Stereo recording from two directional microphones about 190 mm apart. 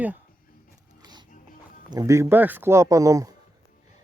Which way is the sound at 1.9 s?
20° right (ahead or behind).